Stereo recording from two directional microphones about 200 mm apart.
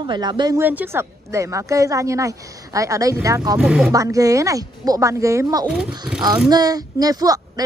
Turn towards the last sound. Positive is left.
turn(degrees=-20)  # may be behind; listen again after turning